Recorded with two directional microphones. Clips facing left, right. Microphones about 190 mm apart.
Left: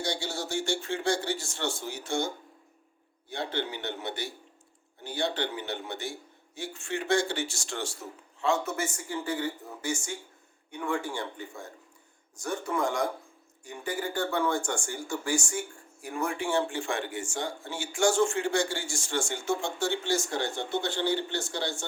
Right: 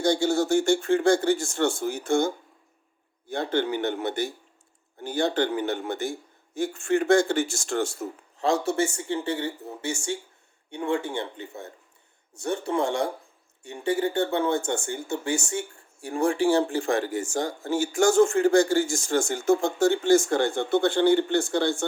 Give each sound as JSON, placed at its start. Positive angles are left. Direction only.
{"t": 0.0, "sound": "a man's voice", "side_deg": -50}
{"t": 8.4, "sound": "a man's voice", "side_deg": -35}